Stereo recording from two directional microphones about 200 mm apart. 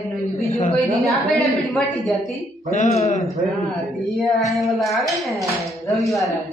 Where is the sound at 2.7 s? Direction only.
35° left (ahead or behind).